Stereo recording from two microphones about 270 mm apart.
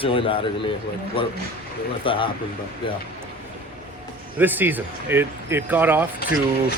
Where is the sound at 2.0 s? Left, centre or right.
Centre.